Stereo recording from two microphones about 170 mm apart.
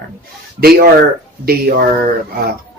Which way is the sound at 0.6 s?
65° right (ahead or behind).